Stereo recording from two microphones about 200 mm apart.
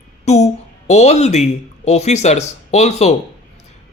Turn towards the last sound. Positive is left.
turn(degrees=35)  # may be behind; listen again after turning